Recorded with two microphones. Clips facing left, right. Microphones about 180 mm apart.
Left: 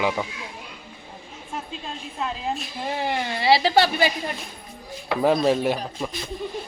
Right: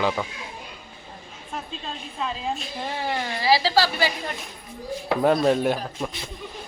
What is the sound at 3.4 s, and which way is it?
Speech, 25° left (ahead or behind).